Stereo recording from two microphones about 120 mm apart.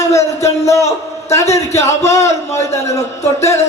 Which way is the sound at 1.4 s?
65° left (ahead or behind).